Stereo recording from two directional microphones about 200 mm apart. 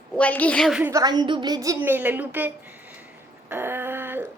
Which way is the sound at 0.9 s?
20° right (ahead or behind).